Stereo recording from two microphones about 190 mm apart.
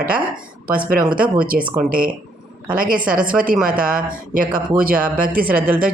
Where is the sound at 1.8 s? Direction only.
50° right (ahead or behind).